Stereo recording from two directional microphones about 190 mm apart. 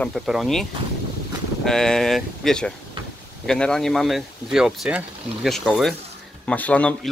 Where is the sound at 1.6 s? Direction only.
Centre (ahead or behind).